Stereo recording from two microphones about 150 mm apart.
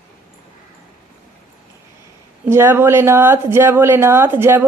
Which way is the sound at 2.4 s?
15° right (ahead or behind).